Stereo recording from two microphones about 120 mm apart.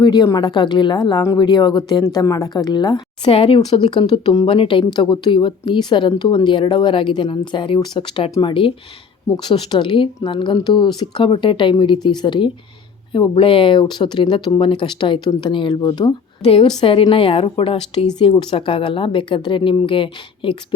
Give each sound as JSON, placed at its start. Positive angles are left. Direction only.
{"t": 0.0, "sound": "speech", "side_deg": 35}
{"t": 1.5, "sound": "speech", "side_deg": 40}
{"t": 3.2, "sound": "speech", "side_deg": 50}
{"t": 3.7, "sound": "speech", "side_deg": 40}
{"t": 16.4, "sound": "speech", "side_deg": 50}